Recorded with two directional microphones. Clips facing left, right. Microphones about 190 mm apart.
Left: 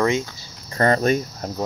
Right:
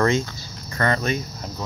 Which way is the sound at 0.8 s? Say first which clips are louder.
Left 5 dB; 40° left (ahead or behind).